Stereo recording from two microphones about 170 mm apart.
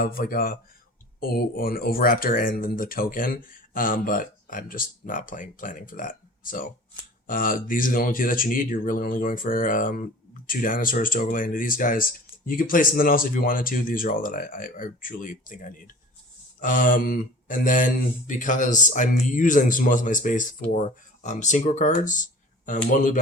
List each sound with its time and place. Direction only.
0.0 s speech: 60° left (ahead or behind)